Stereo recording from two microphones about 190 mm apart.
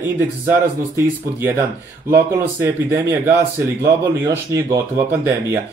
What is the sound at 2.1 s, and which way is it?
Speech, 10° right (ahead or behind).